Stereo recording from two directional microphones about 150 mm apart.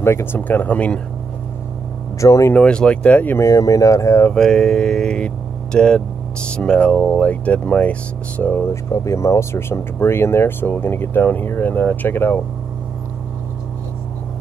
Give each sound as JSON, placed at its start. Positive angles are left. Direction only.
{"t": 0.0, "sound": "speech", "side_deg": 15}
{"t": 2.1, "sound": "speech", "side_deg": 20}
{"t": 2.5, "sound": "speech", "side_deg": 5}
{"t": 4.4, "sound": "speech", "side_deg": 5}